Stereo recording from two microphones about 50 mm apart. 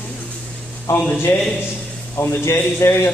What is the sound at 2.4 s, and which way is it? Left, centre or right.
Speech, left.